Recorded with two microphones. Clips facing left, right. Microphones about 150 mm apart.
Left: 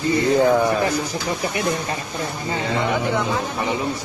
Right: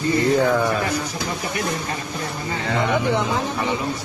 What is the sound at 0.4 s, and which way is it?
Speech, 20° left (ahead or behind).